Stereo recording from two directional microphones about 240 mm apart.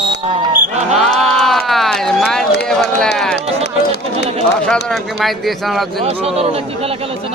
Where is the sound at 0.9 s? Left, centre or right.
Centre.